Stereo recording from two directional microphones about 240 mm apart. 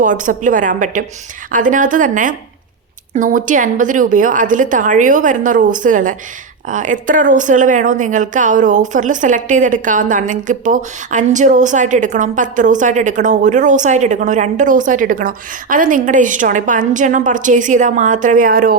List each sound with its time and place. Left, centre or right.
0.0 s a woman's voice: right